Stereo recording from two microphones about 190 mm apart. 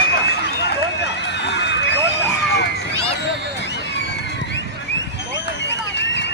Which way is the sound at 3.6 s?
65° left (ahead or behind).